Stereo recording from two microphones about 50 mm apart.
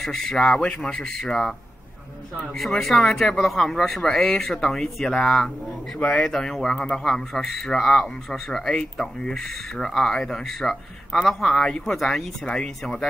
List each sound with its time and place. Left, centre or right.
0.0 s a man's voice: centre
2.6 s a man's voice: centre
5.9 s a man's voice: left
6.2 s a man's voice: centre